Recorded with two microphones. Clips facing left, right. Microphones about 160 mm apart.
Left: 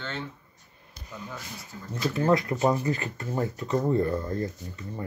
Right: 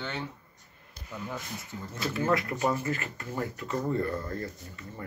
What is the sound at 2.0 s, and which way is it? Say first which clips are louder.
Speech: left 4 dB; 20° left (ahead or behind).